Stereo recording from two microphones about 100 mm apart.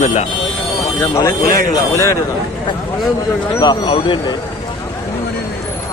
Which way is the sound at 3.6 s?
45° left (ahead or behind).